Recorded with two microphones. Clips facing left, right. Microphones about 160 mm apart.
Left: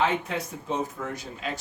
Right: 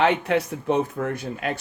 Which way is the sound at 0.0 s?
70° right (ahead or behind).